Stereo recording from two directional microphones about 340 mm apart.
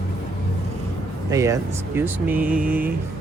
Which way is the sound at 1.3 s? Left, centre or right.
Centre.